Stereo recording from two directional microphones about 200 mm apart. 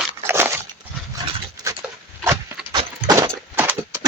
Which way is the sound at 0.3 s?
10° right (ahead or behind).